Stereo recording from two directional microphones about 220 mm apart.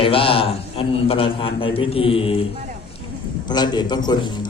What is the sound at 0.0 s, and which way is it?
A man's voice, 25° left (ahead or behind).